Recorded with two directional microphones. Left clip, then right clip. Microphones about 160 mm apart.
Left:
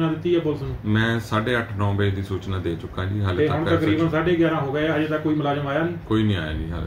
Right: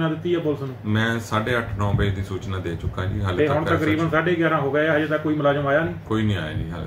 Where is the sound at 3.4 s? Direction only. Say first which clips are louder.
Right 1 dB; 35° right (ahead or behind).